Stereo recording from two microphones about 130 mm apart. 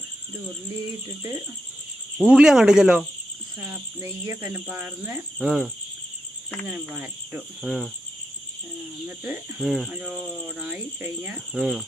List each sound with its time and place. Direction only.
1.0 s speech: 25° right (ahead or behind)
2.1 s speech: 5° right (ahead or behind)
3.6 s cricket: 20° right (ahead or behind)
4.7 s speech: 20° right (ahead or behind)
5.4 s speech: 5° right (ahead or behind)
6.7 s cricket: 10° right (ahead or behind)
7.6 s speech: centre (ahead or behind)
9.0 s cricket: 15° right (ahead or behind)
9.6 s speech: centre (ahead or behind)
9.9 s cricket: 10° right (ahead or behind)
11.6 s speech: centre (ahead or behind)